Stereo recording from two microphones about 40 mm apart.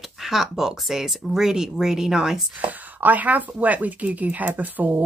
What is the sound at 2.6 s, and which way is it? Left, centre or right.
Speech, right.